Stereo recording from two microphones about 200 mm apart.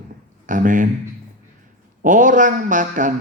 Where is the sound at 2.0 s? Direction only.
40° right (ahead or behind).